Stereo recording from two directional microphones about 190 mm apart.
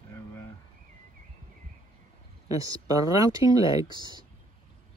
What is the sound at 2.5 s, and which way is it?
Speech, 20° right (ahead or behind).